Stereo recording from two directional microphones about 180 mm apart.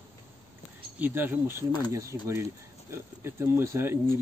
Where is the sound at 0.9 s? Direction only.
10° right (ahead or behind).